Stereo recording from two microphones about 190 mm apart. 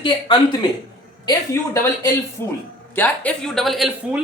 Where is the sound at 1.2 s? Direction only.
15° left (ahead or behind).